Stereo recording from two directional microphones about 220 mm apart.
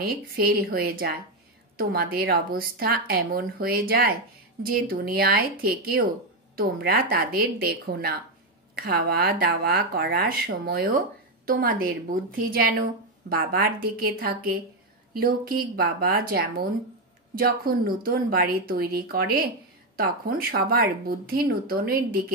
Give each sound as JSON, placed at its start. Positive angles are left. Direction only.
{"t": 0.0, "sound": "a woman's voice", "side_deg": -45}